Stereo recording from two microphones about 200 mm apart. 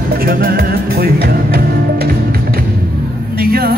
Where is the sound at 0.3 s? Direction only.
50° right (ahead or behind).